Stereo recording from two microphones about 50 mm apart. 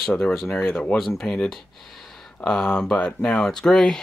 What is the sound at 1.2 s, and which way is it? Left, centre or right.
Speech, centre.